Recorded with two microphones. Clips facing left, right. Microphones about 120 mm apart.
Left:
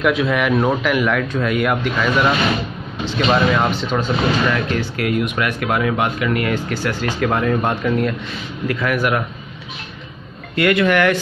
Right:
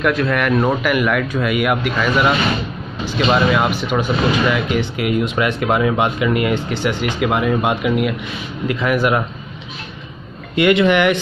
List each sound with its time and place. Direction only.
0.0 s a man's voice: centre (ahead or behind)
8.6 s speech: 20° right (ahead or behind)
10.5 s speech: 20° right (ahead or behind)